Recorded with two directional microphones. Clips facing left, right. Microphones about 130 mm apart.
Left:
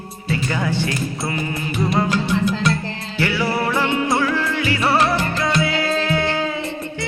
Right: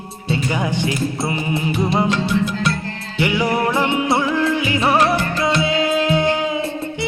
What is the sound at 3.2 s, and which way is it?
Music, 20° right (ahead or behind).